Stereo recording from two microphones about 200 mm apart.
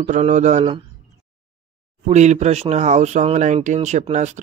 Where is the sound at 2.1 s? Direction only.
35° right (ahead or behind).